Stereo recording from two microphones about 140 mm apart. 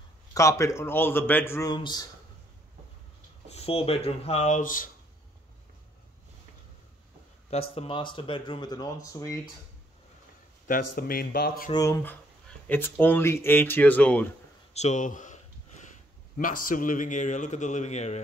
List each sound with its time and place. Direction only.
0.3 s speech: 20° left (ahead or behind)
3.4 s speech: 45° left (ahead or behind); by 4.9 s 70° left (ahead or behind)
7.4 s speech: 45° left (ahead or behind); by 9.3 s 25° left (ahead or behind)
10.7 s speech: 90° left
11.7 s speech: 20° left (ahead or behind)
14.7 s speech: 55° left (ahead or behind)